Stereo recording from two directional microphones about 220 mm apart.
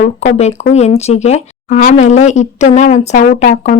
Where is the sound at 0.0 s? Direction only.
35° left (ahead or behind).